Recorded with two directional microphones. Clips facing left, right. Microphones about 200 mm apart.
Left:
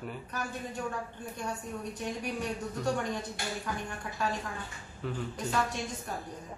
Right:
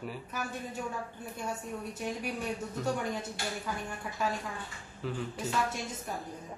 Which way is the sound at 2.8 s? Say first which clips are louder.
Left 1 dB; 5° right (ahead or behind).